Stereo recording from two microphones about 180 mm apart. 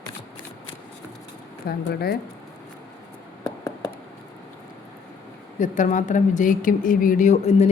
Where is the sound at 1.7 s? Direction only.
60° left (ahead or behind).